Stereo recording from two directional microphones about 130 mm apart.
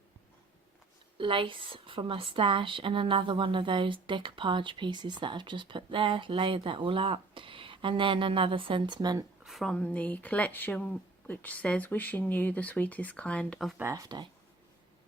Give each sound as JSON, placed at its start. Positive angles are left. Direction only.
{"t": 1.2, "sound": "a woman's voice", "side_deg": -40}
{"t": 9.4, "sound": "speech", "side_deg": 0}
{"t": 13.7, "sound": "speech", "side_deg": -25}